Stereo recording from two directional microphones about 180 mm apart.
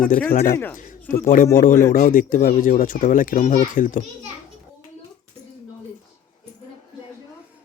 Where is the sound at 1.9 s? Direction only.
50° left (ahead or behind).